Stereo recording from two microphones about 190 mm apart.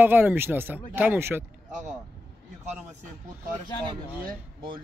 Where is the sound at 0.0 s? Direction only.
10° right (ahead or behind).